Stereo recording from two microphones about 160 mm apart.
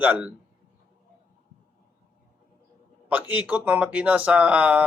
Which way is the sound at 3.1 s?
10° right (ahead or behind).